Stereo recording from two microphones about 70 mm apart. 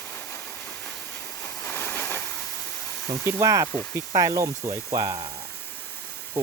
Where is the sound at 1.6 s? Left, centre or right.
Left.